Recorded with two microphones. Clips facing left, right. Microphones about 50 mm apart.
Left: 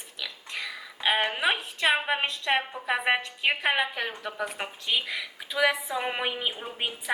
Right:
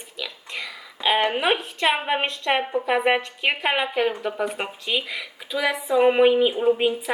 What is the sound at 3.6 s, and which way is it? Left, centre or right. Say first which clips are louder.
Speech: right 5 dB; right.